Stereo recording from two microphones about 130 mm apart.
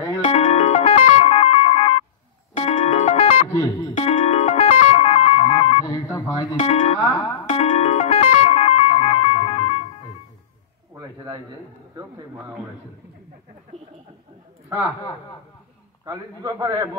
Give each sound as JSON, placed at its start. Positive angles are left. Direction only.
{"t": 0.2, "sound": "music", "side_deg": 60}
{"t": 3.5, "sound": "music", "side_deg": 30}
{"t": 3.9, "sound": "music", "side_deg": 65}
{"t": 5.9, "sound": "a sound", "side_deg": 25}
{"t": 6.6, "sound": "music", "side_deg": 60}
{"t": 11.0, "sound": "a sound", "side_deg": -30}
{"t": 12.0, "sound": "a man's voice", "side_deg": -35}
{"t": 16.1, "sound": "a man's voice", "side_deg": -30}